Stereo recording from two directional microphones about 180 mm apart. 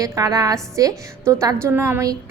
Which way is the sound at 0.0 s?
20° right (ahead or behind).